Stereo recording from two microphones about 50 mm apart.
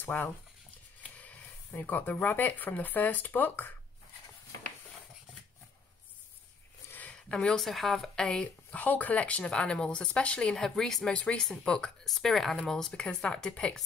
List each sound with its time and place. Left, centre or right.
0.0 s speech: left
1.1 s a sound: left
1.7 s speech: left
7.2 s speech: centre
8.2 s speech: centre
10.5 s speech: centre
11.1 s speech: left
12.0 s speech: centre